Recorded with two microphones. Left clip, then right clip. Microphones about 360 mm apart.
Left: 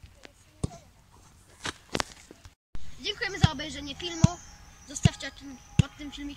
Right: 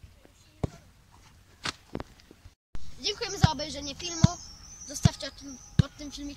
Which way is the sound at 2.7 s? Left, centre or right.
Centre.